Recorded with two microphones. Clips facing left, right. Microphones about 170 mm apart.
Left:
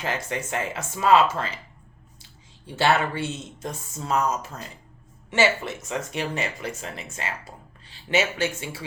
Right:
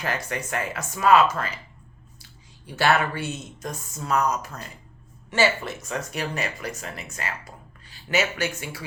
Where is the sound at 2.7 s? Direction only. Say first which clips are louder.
Even; 25° left (ahead or behind).